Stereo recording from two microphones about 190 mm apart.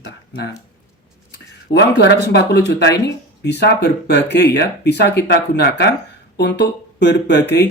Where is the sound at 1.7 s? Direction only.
60° left (ahead or behind).